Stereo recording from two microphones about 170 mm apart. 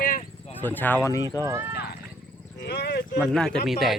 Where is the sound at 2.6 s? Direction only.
75° left (ahead or behind).